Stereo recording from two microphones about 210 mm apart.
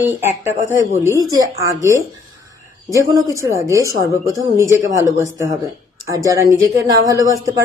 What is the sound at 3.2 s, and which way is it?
A woman's voice, 15° right (ahead or behind).